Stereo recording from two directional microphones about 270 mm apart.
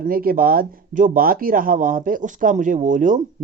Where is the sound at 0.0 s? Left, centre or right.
Right.